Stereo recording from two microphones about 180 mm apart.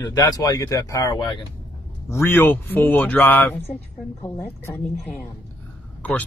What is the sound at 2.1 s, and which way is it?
Speech, 10° left (ahead or behind).